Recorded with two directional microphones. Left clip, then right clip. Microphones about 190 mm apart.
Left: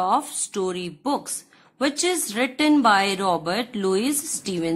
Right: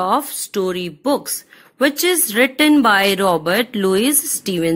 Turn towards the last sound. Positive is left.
turn(degrees=-20)  # may be behind; listen again after turning